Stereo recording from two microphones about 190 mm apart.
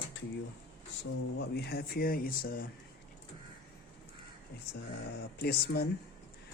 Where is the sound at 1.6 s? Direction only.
55° left (ahead or behind).